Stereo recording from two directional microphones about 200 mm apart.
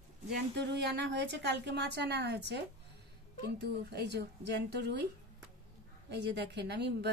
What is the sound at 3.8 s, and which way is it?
A woman's voice, 55° right (ahead or behind).